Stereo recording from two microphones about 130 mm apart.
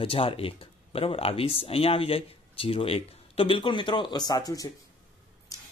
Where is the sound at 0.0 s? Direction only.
45° left (ahead or behind).